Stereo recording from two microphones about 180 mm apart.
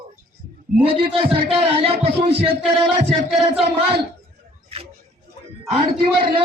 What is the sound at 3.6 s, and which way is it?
Speech, 30° right (ahead or behind).